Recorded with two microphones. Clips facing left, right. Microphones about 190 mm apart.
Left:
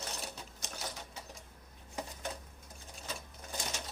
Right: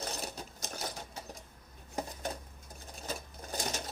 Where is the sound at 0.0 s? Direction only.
40° right (ahead or behind).